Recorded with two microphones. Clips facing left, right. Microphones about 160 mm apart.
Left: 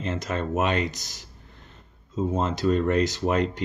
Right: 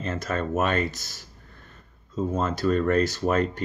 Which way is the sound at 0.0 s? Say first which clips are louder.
Even; 20° left (ahead or behind).